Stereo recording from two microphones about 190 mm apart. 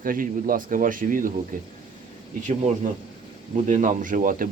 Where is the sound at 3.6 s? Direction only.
40° right (ahead or behind).